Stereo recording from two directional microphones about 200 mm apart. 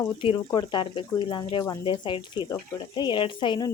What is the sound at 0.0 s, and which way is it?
Speech, 25° left (ahead or behind).